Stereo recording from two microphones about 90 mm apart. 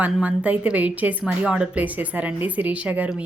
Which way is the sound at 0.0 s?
15° right (ahead or behind).